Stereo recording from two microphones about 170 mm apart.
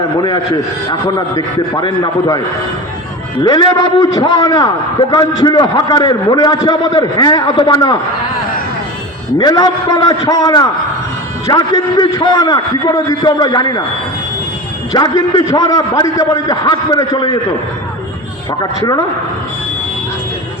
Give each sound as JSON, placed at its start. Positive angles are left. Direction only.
{"t": 0.2, "sound": "a man's voice", "side_deg": 25}
{"t": 3.4, "sound": "a man's voice", "side_deg": 25}
{"t": 9.4, "sound": "a man's voice", "side_deg": 25}
{"t": 14.9, "sound": "a man's voice", "side_deg": 25}
{"t": 18.6, "sound": "a man's voice", "side_deg": 25}